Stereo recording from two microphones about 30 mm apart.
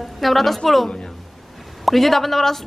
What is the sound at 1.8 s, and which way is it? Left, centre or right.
Speech, centre.